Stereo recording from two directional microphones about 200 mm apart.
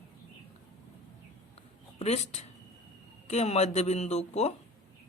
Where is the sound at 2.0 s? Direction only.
35° left (ahead or behind).